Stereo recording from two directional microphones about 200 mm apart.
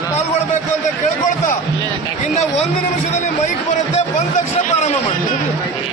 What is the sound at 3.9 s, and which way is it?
Speech, 40° left (ahead or behind).